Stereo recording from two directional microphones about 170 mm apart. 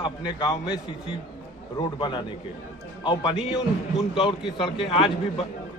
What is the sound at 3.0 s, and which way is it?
Speech, 25° left (ahead or behind).